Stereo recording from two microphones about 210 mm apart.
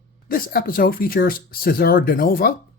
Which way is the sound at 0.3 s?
45° left (ahead or behind).